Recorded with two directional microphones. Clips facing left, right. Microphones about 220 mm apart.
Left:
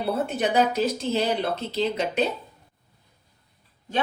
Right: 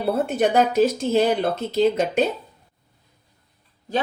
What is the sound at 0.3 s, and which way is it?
Speech, 50° right (ahead or behind).